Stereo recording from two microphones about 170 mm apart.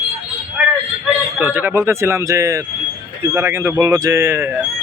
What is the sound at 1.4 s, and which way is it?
Speech, 10° right (ahead or behind).